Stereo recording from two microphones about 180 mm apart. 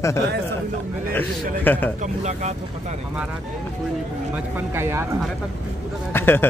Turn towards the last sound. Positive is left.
turn(degrees=10)  # may be behind; listen again after turning